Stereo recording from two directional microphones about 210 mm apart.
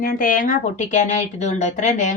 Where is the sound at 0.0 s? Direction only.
40° left (ahead or behind).